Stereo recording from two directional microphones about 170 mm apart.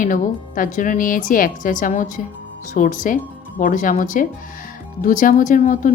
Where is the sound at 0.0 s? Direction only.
50° left (ahead or behind).